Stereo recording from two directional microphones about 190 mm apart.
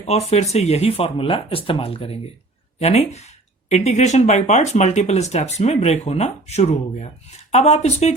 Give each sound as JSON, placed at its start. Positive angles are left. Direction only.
{"t": 0.0, "sound": "speech", "side_deg": 35}